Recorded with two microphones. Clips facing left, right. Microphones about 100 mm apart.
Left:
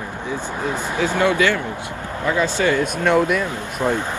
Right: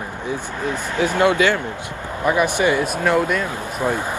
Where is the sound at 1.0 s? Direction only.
20° right (ahead or behind).